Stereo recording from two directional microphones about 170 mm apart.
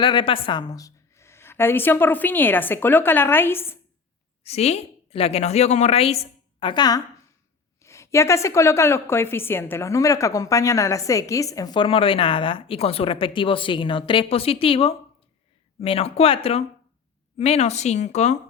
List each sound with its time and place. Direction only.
0.0 s a woman's voice: 30° left (ahead or behind); by 3.8 s 15° left (ahead or behind)
4.4 s a woman's voice: 40° left (ahead or behind)